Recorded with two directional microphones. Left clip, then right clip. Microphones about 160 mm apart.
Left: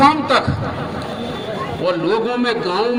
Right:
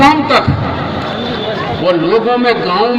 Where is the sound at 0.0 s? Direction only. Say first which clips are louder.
Right 4 dB; 50° left (ahead or behind).